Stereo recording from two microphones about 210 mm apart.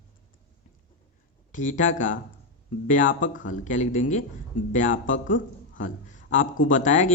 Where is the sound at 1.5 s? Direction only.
35° left (ahead or behind).